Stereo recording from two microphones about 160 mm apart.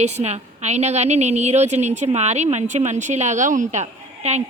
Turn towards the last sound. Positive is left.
turn(degrees=-45)  # may be behind; listen again after turning